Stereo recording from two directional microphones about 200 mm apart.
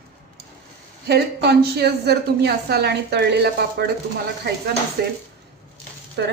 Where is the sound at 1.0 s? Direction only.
55° right (ahead or behind).